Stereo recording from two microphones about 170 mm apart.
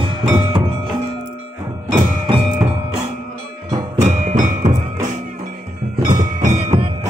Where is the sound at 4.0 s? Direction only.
45° right (ahead or behind).